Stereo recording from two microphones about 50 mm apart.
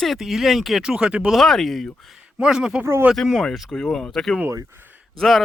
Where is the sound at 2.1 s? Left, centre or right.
Centre.